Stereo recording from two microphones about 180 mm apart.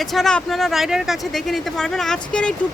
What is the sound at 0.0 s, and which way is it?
Speech, centre (ahead or behind).